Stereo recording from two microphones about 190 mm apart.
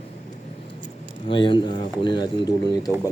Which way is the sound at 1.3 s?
25° left (ahead or behind).